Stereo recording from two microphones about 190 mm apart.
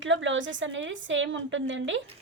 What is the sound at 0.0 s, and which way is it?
A woman's voice, 80° right.